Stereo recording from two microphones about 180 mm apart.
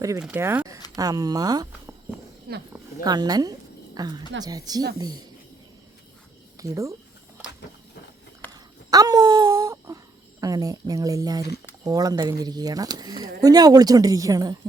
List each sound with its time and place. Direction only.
0.2 s speech: 10° right (ahead or behind)
2.5 s speech: 60° right (ahead or behind)
3.0 s speech: 20° right (ahead or behind)
6.6 s speech: 15° right (ahead or behind)
8.5 s wail: 20° right (ahead or behind)
10.4 s speech: 20° right (ahead or behind)